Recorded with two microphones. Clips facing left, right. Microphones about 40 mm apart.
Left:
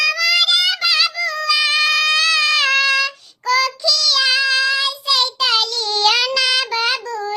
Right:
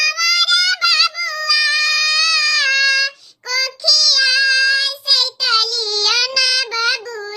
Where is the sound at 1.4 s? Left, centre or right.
Left.